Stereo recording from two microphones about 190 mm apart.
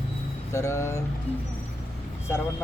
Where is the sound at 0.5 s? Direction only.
15° left (ahead or behind).